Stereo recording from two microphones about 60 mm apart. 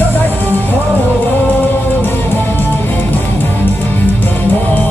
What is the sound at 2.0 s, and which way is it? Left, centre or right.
Music, left.